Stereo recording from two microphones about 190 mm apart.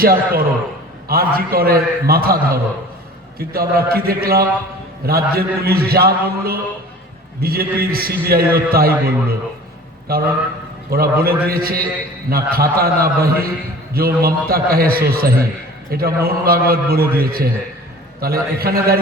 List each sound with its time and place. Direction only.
0.0 s a man's voice: 50° right (ahead or behind)
10.1 s a man's voice: 50° right (ahead or behind)